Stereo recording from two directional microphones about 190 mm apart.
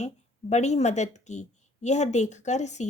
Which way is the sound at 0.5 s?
35° left (ahead or behind).